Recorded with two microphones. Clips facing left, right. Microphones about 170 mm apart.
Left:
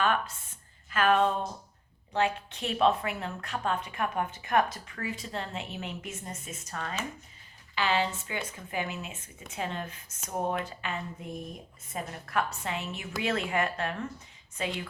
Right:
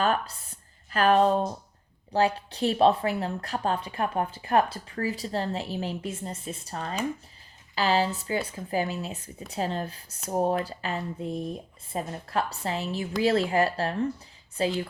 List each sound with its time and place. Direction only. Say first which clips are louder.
0.0 s a woman's voice: right 2 dB; 35° right (ahead or behind)